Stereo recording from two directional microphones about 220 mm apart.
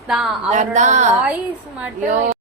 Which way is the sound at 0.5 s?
35° right (ahead or behind).